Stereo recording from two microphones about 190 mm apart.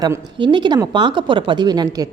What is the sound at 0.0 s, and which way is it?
A woman's voice, 20° right (ahead or behind).